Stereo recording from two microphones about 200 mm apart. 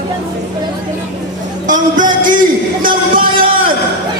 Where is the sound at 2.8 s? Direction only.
45° right (ahead or behind).